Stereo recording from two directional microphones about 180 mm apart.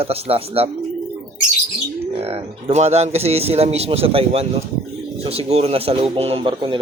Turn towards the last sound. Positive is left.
turn(degrees=-30)  # may be behind; listen again after turning